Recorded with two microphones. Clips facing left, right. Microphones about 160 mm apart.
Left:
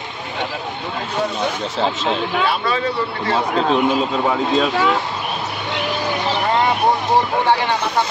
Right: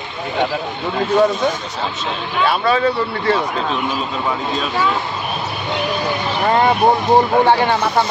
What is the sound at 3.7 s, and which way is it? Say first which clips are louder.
Speech: left 5 dB; 65° left (ahead or behind).